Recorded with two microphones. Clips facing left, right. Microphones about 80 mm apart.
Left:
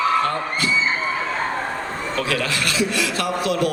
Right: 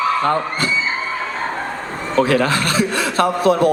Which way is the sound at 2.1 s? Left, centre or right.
Right.